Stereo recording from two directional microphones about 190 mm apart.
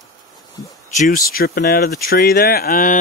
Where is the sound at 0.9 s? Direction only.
45° left (ahead or behind).